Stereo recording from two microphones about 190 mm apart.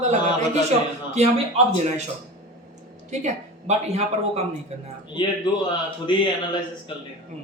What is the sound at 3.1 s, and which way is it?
Speech, 35° right (ahead or behind).